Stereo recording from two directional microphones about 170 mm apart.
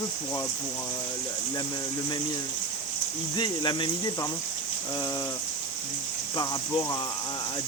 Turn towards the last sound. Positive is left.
turn(degrees=25)  # may be behind; listen again after turning